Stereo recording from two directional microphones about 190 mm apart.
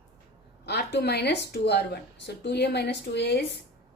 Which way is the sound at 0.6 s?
60° left (ahead or behind).